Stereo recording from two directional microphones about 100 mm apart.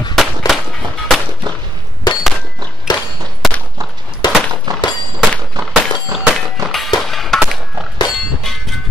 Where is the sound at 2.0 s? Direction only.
45° left (ahead or behind).